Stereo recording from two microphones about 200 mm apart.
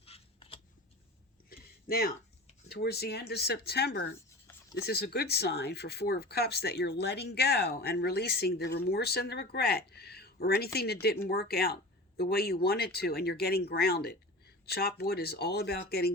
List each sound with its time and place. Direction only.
0.0 s scissors: 30° left (ahead or behind)
1.5 s a sound: 50° left (ahead or behind)
2.6 s speech: 55° left (ahead or behind)